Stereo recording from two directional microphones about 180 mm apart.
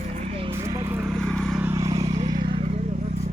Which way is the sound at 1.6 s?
20° right (ahead or behind).